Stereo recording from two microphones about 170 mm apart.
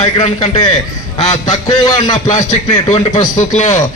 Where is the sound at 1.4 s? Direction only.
25° left (ahead or behind).